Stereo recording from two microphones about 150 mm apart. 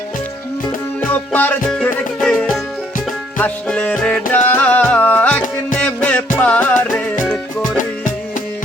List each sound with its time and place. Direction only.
1.1 s music: 10° left (ahead or behind)